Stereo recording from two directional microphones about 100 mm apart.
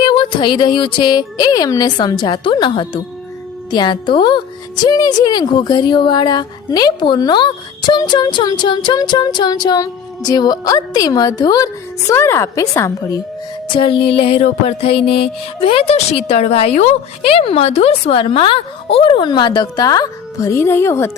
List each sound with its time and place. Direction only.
0.0 s speech: 55° left (ahead or behind); by 13.1 s 35° left (ahead or behind)
13.7 s music: 60° left (ahead or behind)
15.6 s a woman's voice: 80° left; by 21.1 s 25° left (ahead or behind)